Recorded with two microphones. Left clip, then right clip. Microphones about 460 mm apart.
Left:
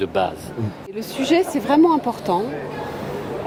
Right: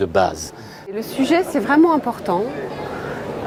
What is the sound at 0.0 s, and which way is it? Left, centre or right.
Speech, right.